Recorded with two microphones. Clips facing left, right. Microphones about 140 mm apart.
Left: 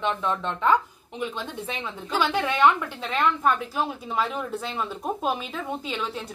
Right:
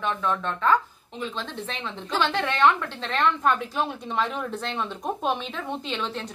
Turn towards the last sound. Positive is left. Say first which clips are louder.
# even
turn(degrees=5)  # may be behind; listen again after turning